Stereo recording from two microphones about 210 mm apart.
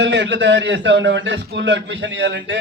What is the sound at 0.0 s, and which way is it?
A man's voice, 55° right (ahead or behind).